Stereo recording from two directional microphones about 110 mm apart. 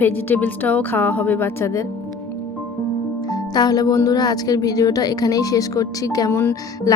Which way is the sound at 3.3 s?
40° left (ahead or behind).